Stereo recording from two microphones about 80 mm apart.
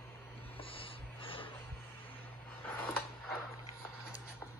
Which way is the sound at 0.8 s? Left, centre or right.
Left.